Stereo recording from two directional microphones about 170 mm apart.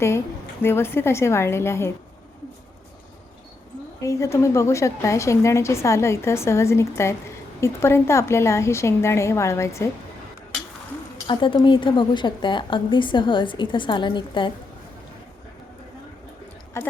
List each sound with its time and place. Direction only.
0.6 s a woman's voice: 15° left (ahead or behind)
4.0 s a woman's voice: 20° left (ahead or behind)
11.3 s a woman's voice: 30° left (ahead or behind)
16.8 s a woman's voice: 15° left (ahead or behind)